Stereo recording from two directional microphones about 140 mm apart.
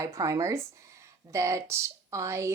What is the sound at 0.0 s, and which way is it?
Speech, 25° right (ahead or behind).